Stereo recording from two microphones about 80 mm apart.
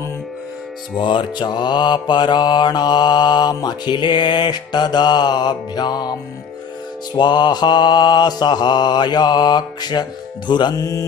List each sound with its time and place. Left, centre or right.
0.9 s mantra: left
7.2 s mantra: left
10.8 s mantra: left